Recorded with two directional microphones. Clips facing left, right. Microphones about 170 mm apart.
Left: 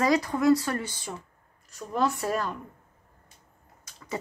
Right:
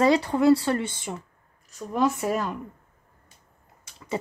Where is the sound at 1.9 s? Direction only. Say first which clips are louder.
Right 3 dB; 10° right (ahead or behind).